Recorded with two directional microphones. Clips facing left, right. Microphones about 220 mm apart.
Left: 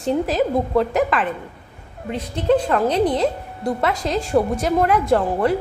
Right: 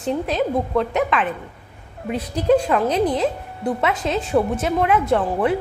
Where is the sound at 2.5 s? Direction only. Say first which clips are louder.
Even; 5° right (ahead or behind).